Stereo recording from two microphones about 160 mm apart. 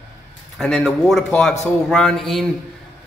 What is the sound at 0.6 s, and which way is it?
A man's voice, 5° left (ahead or behind).